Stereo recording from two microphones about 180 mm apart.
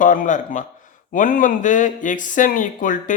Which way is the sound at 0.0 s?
50° left (ahead or behind).